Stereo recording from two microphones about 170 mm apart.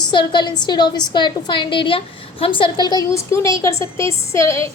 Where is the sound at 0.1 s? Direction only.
25° left (ahead or behind).